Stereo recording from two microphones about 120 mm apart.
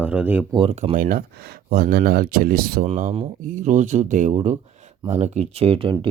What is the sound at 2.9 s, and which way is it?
Speech, 90° right.